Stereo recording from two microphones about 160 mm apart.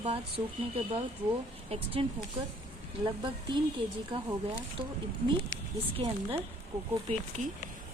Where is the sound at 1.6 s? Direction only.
40° right (ahead or behind).